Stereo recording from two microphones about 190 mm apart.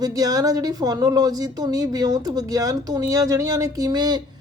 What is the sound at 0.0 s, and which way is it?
Speech, 20° right (ahead or behind).